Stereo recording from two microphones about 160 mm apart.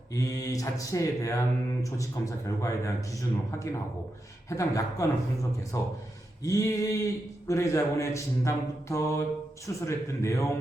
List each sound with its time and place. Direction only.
0.1 s a man's voice: 20° left (ahead or behind)